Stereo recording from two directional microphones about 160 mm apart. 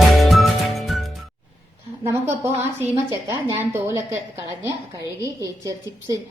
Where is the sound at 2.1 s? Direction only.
15° right (ahead or behind).